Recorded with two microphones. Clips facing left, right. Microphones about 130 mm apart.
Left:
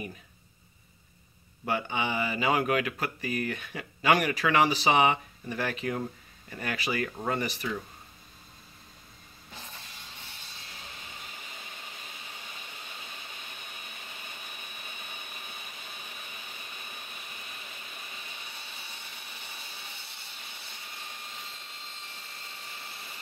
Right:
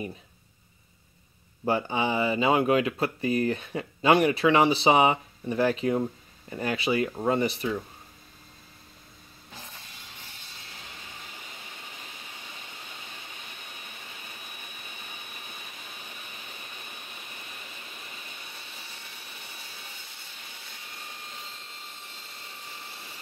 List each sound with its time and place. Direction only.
1.7 s speech: 35° right (ahead or behind)